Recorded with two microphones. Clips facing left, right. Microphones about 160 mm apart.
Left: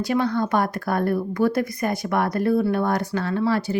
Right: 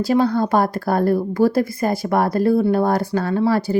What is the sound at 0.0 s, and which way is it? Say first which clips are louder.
A woman's voice: right 5 dB; 30° right (ahead or behind).